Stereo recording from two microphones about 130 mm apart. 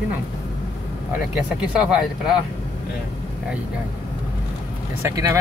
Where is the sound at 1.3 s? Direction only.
10° right (ahead or behind).